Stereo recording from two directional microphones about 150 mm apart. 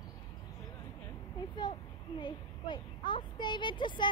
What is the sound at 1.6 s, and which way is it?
A child's voice, 30° left (ahead or behind).